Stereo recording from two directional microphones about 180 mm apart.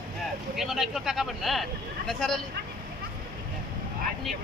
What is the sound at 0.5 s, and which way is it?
Speech, centre (ahead or behind).